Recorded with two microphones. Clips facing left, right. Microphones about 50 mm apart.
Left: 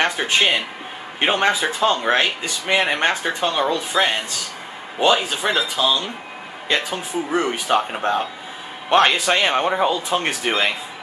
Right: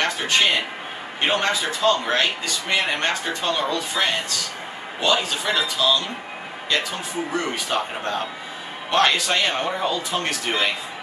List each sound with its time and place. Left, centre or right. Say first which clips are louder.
0.2 s speech: left 1 dB; centre